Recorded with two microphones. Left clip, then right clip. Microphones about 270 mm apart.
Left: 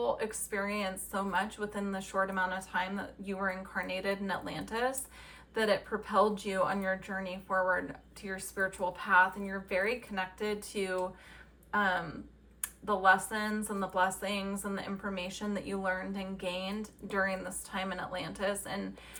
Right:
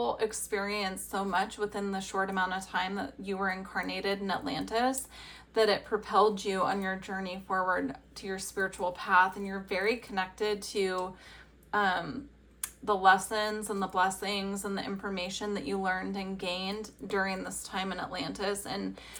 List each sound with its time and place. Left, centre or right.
0.0 s a woman's voice: centre